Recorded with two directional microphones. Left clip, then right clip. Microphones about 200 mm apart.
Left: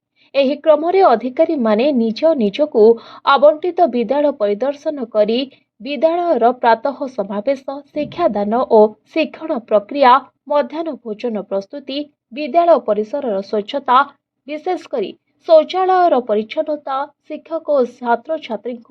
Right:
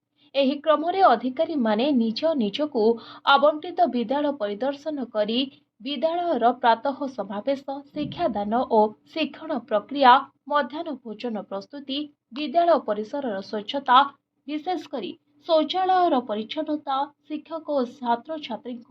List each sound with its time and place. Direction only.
0.3 s a woman's voice: 35° left (ahead or behind)